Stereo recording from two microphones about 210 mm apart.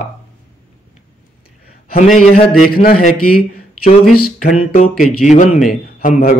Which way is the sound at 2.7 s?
45° left (ahead or behind).